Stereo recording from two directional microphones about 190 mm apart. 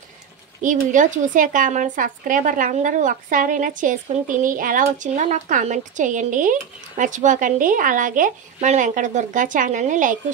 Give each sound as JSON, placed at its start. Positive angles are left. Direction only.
{"t": 0.6, "sound": "speech", "side_deg": -45}